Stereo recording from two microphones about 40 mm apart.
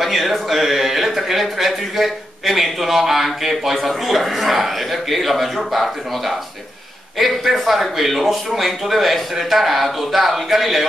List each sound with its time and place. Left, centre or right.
0.0 s speech: centre